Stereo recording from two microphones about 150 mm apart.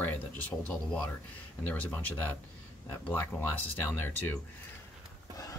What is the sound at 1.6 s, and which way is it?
Speech, 10° left (ahead or behind).